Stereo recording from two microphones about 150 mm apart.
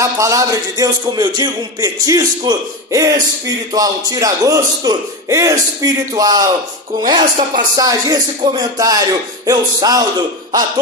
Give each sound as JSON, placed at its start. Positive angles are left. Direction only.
{"t": 0.0, "sound": "speech", "side_deg": -20}